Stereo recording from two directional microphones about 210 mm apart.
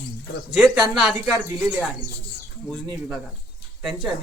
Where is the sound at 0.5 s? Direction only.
Centre (ahead or behind).